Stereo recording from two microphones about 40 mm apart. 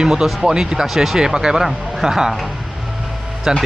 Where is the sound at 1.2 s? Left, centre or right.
Centre.